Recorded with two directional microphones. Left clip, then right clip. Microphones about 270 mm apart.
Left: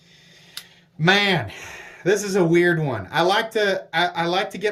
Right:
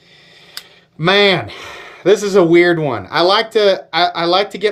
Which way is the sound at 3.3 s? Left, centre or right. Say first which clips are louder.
Right 9 dB; centre.